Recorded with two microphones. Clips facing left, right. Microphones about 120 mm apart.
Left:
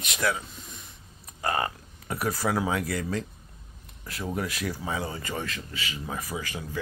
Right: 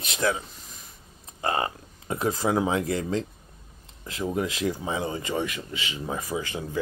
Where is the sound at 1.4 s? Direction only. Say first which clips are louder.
Right 1 dB; 25° right (ahead or behind).